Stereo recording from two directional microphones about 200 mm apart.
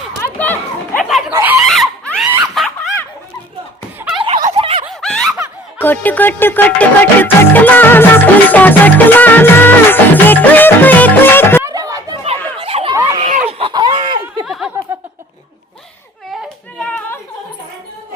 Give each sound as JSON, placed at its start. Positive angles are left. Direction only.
{"t": 0.2, "sound": "a sound", "side_deg": 10}
{"t": 1.3, "sound": "chicken", "side_deg": -10}
{"t": 1.7, "sound": "screaming", "side_deg": 0}
{"t": 2.6, "sound": "snicker", "side_deg": 0}
{"t": 4.2, "sound": "a sound", "side_deg": -25}
{"t": 4.9, "sound": "snicker", "side_deg": 0}
{"t": 5.8, "sound": "music", "side_deg": 10}
{"t": 11.6, "sound": "chatter", "side_deg": -15}
{"t": 12.2, "sound": "chatter", "side_deg": -30}
{"t": 13.1, "sound": "a sound", "side_deg": -35}
{"t": 14.4, "sound": "snicker", "side_deg": 0}
{"t": 16.3, "sound": "yodeling", "side_deg": 0}